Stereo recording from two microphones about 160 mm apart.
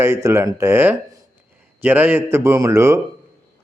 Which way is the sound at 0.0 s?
15° right (ahead or behind).